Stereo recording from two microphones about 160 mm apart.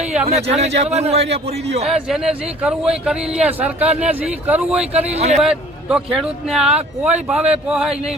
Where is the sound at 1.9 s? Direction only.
5° right (ahead or behind).